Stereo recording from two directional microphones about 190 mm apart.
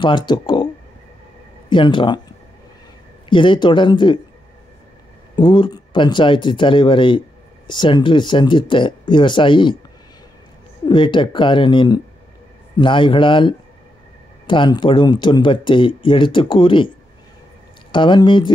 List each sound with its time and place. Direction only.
0.0 s speech: 25° left (ahead or behind)
1.7 s speech: 25° left (ahead or behind)
3.3 s speech: 25° left (ahead or behind)
5.3 s speech: 25° left (ahead or behind)
10.9 s speech: 25° left (ahead or behind)
17.9 s speech: 25° left (ahead or behind)